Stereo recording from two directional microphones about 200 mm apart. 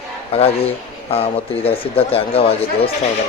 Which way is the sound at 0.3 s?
30° left (ahead or behind).